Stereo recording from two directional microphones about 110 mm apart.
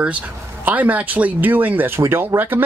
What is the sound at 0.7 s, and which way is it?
Speech, 15° right (ahead or behind).